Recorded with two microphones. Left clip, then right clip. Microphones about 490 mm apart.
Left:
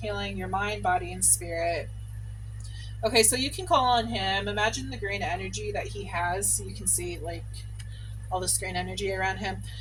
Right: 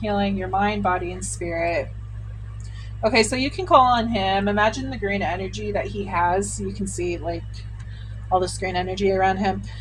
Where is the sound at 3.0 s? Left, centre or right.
Left.